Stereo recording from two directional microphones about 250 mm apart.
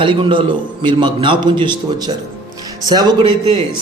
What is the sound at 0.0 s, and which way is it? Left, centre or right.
A man's voice, centre.